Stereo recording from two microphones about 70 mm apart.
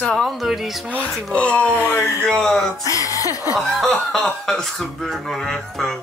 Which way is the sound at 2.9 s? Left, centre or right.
Left.